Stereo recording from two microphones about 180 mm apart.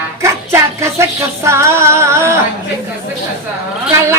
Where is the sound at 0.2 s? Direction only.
15° right (ahead or behind).